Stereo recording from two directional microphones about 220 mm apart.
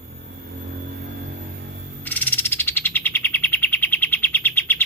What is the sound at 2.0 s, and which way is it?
Bird, 10° left (ahead or behind).